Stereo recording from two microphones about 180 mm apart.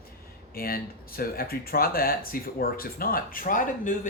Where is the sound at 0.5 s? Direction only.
55° left (ahead or behind).